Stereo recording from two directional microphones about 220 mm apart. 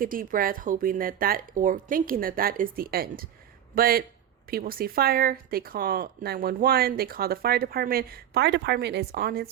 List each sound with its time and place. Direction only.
0.0 s a woman's voice: 40° right (ahead or behind)